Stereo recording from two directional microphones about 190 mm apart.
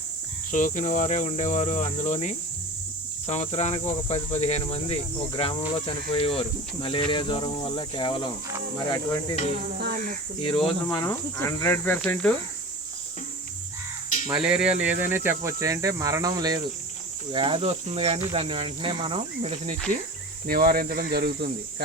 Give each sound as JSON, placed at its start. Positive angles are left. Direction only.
{"t": 0.5, "sound": "speech", "side_deg": 45}
{"t": 9.7, "sound": "speech", "side_deg": -50}
{"t": 10.4, "sound": "speech", "side_deg": 25}
{"t": 10.9, "sound": "cricket", "side_deg": 15}
{"t": 14.3, "sound": "speech", "side_deg": -5}
{"t": 20.5, "sound": "speech", "side_deg": -50}